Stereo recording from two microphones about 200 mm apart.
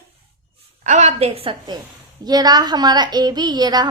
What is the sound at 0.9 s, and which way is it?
A woman's voice, 35° right (ahead or behind).